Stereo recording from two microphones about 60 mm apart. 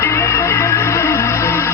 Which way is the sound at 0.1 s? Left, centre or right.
Left.